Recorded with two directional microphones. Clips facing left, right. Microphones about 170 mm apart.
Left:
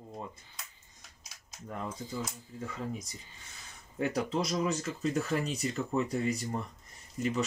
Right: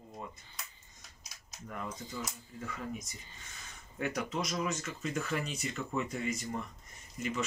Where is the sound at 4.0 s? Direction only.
30° left (ahead or behind).